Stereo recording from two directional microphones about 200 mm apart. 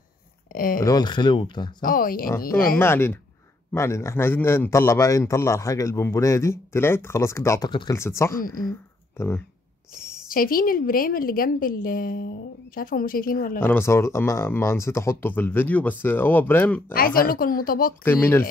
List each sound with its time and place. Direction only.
0.5 s speech: 45° left (ahead or behind)
0.8 s speech: 20° left (ahead or behind)
1.8 s a woman's voice: 45° left (ahead or behind)
2.8 s a man's voice: 10° left (ahead or behind)
8.4 s a woman's voice: 45° left (ahead or behind)
8.6 s speech: 15° left (ahead or behind)
10.2 s a woman's voice: 45° left (ahead or behind)
13.6 s a man's voice: 10° left (ahead or behind)
16.9 s a woman's voice: 45° left (ahead or behind)
18.0 s a man's voice: 10° left (ahead or behind)